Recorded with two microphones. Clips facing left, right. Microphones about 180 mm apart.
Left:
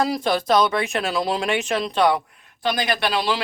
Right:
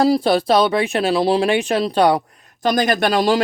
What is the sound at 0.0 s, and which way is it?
Speech, 35° right (ahead or behind).